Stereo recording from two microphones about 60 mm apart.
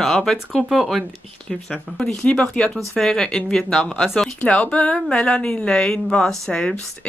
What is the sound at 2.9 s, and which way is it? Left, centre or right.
Speech, centre.